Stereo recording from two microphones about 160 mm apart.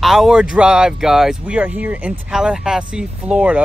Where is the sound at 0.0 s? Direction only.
Centre (ahead or behind).